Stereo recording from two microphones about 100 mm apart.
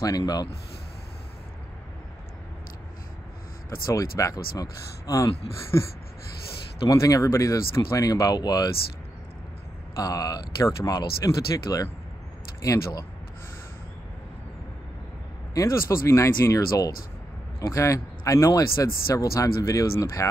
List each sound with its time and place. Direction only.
0.0 s speech: 35° left (ahead or behind)
3.7 s speech: 30° left (ahead or behind)
6.9 s speech: 35° left (ahead or behind)
9.9 s speech: 40° left (ahead or behind)
15.5 s speech: 30° left (ahead or behind)